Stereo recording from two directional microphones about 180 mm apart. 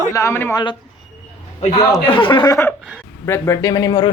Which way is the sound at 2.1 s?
25° left (ahead or behind).